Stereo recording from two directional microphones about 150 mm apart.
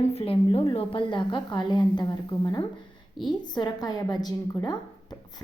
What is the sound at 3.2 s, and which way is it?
A woman's voice, 30° left (ahead or behind).